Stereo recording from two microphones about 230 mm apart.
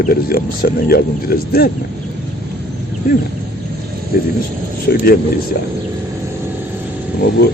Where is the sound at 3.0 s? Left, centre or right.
Left.